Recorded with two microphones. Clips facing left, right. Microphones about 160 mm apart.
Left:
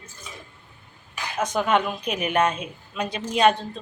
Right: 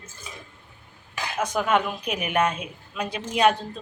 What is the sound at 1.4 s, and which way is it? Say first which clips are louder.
Speech: left 1 dB; 10° right (ahead or behind).